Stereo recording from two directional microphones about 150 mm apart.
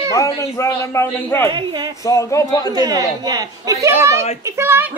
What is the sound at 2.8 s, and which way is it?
A child's voice, 25° right (ahead or behind).